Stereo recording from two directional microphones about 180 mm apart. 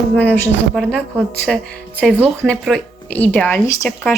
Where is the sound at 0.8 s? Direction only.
Centre (ahead or behind).